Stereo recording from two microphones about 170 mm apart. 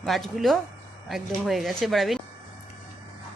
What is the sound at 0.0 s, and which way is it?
Speech, centre (ahead or behind).